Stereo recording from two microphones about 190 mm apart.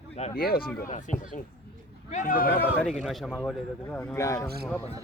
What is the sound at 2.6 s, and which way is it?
A man's voice, 5° left (ahead or behind).